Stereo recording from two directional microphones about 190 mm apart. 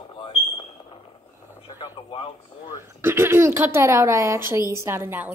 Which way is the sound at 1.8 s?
30° left (ahead or behind).